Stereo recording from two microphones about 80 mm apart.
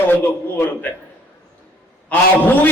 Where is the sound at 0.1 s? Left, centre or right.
Left.